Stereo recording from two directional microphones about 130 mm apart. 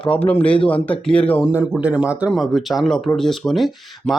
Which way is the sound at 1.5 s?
15° right (ahead or behind).